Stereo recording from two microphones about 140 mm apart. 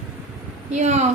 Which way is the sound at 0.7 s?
55° right (ahead or behind).